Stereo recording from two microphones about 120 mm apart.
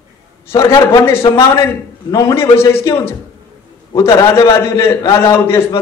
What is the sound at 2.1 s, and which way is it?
A man's voice, 25° left (ahead or behind).